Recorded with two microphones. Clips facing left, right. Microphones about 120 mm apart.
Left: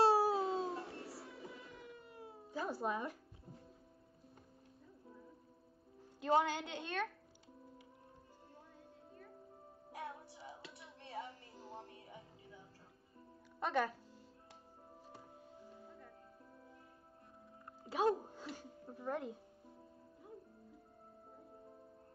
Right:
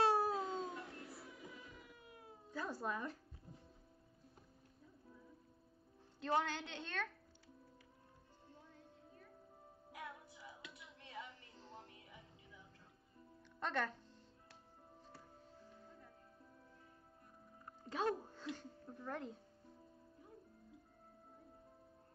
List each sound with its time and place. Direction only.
0.3 s music: 30° left (ahead or behind)
1.7 s cat: centre (ahead or behind)
2.5 s a woman's voice: 10° left (ahead or behind)
6.2 s a woman's voice: 15° left (ahead or behind)
9.9 s music: 30° left (ahead or behind)
11.5 s music: 10° left (ahead or behind)
11.8 s music: 30° left (ahead or behind)
13.6 s speech: 10° left (ahead or behind)
15.0 s music: 15° left (ahead or behind)
17.8 s music: 15° left (ahead or behind)